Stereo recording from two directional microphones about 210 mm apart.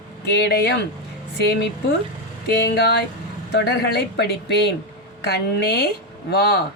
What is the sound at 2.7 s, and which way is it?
Speech, 50° left (ahead or behind).